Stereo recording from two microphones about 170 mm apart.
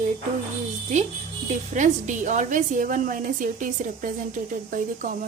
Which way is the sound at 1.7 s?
45° right (ahead or behind).